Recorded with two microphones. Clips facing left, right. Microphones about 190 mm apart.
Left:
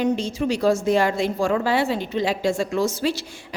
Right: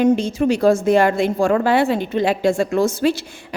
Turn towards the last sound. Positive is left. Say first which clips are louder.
# right 5 dB
turn(degrees=-55)  # may be behind; listen again after turning